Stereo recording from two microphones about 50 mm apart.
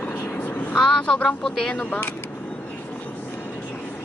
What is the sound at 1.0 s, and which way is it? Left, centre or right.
Speech, centre.